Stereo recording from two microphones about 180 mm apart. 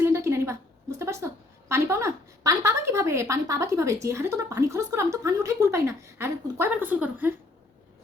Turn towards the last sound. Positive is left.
turn(degrees=-10)  # may be behind; listen again after turning